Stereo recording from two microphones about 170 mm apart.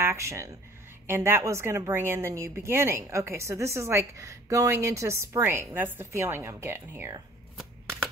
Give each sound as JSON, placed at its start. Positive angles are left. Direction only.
{"t": 0.0, "sound": "a woman's voice", "side_deg": -15}